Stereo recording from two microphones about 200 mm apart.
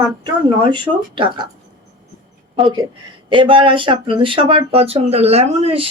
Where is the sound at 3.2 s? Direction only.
25° right (ahead or behind).